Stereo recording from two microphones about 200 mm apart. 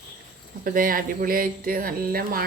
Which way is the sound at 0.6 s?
45° right (ahead or behind).